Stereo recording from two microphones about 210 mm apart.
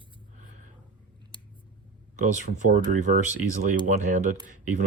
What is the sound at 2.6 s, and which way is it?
Speech, 35° right (ahead or behind).